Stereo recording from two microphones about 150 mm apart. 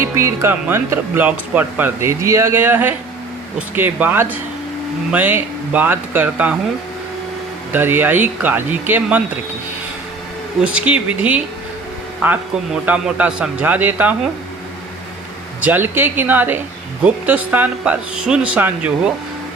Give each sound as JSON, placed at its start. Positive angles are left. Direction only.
{"t": 0.0, "sound": "speech", "side_deg": -20}
{"t": 7.7, "sound": "speech", "side_deg": -15}
{"t": 10.6, "sound": "speech", "side_deg": -10}
{"t": 15.6, "sound": "speech", "side_deg": -15}